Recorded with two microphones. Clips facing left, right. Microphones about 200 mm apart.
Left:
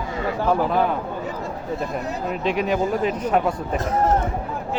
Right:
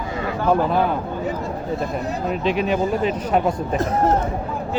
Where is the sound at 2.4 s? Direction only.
30° right (ahead or behind).